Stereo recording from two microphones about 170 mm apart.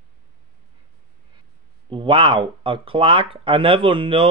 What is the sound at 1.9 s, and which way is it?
Speech, 30° right (ahead or behind).